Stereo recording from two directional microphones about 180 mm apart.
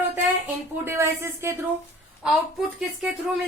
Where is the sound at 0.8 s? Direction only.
15° right (ahead or behind).